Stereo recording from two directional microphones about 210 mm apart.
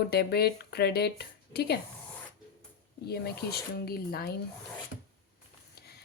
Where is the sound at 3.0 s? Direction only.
50° left (ahead or behind).